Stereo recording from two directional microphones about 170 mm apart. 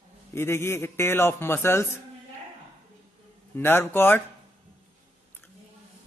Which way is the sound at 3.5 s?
15° left (ahead or behind).